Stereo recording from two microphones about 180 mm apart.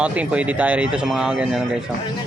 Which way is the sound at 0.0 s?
5° right (ahead or behind).